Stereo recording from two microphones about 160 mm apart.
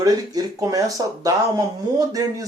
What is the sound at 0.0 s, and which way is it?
Speech, 20° right (ahead or behind).